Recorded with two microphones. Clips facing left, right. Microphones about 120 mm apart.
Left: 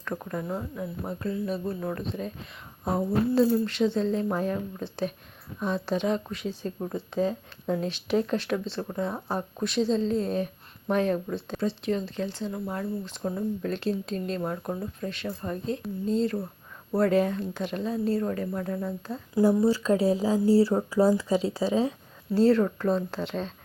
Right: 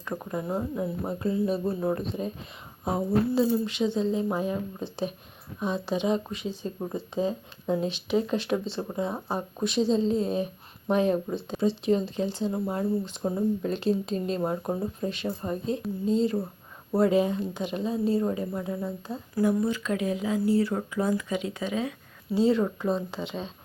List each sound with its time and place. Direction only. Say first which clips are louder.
0.0 s speech: right 1 dB; 15° right (ahead or behind)
2.8 s speech: even; 10° right (ahead or behind); by 13.4 s 25° right (ahead or behind)
13.6 s speech: right 2 dB; 15° right (ahead or behind)
15.8 s speech: right 1 dB; 5° right (ahead or behind)
19.4 s speech: left 3 dB; 30° left (ahead or behind)
22.5 s speech: left 2 dB; 5° right (ahead or behind)